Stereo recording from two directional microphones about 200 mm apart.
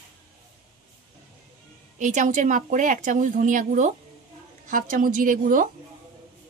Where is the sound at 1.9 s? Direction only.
40° right (ahead or behind).